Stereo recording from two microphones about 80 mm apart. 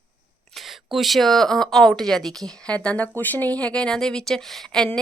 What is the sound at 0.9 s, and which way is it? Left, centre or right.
Speech, centre.